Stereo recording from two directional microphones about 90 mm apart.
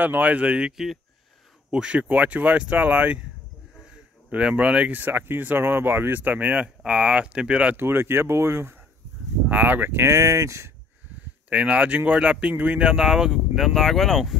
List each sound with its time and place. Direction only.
0.0 s speech: 20° right (ahead or behind)
7.7 s speech: 25° right (ahead or behind)
11.4 s speech: 15° right (ahead or behind); by 14.3 s centre (ahead or behind)